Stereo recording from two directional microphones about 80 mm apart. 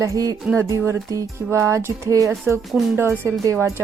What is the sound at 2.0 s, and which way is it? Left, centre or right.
Speech, right.